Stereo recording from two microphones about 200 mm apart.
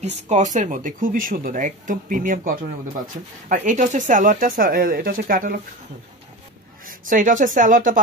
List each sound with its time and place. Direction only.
0.3 s speech: 35° right (ahead or behind)
6.9 s speech: 40° right (ahead or behind)